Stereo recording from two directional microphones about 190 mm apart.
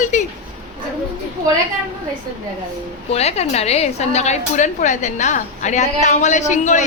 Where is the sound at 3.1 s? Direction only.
35° left (ahead or behind).